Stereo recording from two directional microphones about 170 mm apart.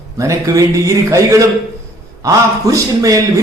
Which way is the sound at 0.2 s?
20° right (ahead or behind).